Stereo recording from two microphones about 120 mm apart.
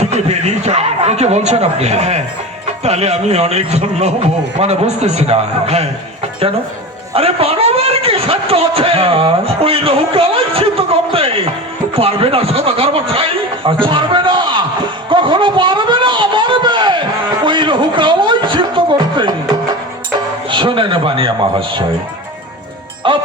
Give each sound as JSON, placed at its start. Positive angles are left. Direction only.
{"t": 0.0, "sound": "a man's voice", "side_deg": -65}
{"t": 7.1, "sound": "a sound", "side_deg": -55}
{"t": 11.9, "sound": "a man's voice", "side_deg": -50}
{"t": 15.1, "sound": "a sound", "side_deg": -45}
{"t": 20.5, "sound": "a man's voice", "side_deg": -45}
{"t": 23.0, "sound": "speech", "side_deg": -45}